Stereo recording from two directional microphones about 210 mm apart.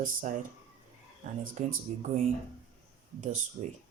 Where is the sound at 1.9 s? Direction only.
35° right (ahead or behind).